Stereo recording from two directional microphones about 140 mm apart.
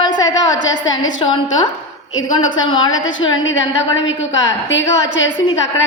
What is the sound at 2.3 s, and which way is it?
Speech, 35° left (ahead or behind).